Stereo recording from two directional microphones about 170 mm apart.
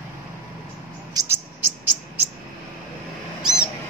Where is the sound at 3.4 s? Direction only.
5° right (ahead or behind).